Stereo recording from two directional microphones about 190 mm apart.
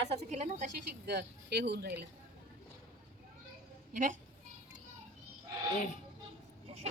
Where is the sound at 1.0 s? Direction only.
60° right (ahead or behind).